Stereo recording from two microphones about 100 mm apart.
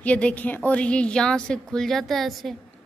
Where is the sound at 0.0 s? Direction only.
15° left (ahead or behind).